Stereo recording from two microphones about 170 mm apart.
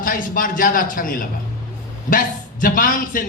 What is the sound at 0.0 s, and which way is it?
A man's voice, 55° left (ahead or behind).